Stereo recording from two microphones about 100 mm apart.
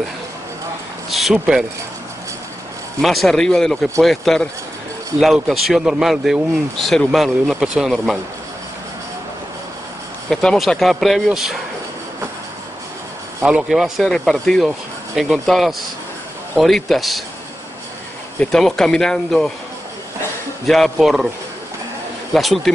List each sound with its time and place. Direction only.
1.1 s speech: centre (ahead or behind)
3.0 s speech: centre (ahead or behind)
10.3 s speech: 5° left (ahead or behind)
13.4 s speech: 10° right (ahead or behind)
18.4 s speech: 5° left (ahead or behind)
20.6 s speech: 5° left (ahead or behind)
22.3 s speech: centre (ahead or behind)